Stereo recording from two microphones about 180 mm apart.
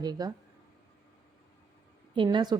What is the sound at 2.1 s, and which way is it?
Speech, 25° right (ahead or behind).